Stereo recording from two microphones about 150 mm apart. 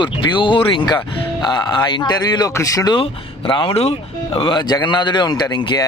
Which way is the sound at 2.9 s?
35° left (ahead or behind).